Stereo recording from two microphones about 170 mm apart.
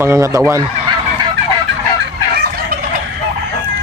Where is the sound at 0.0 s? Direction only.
15° right (ahead or behind).